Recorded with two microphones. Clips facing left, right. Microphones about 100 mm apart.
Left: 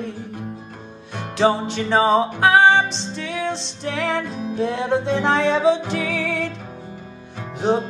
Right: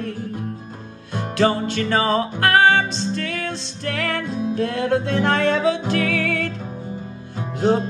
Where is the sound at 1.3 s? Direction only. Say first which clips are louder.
Left 1 dB; 10° left (ahead or behind).